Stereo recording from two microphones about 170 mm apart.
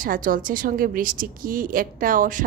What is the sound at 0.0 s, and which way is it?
A woman's voice, 55° right (ahead or behind).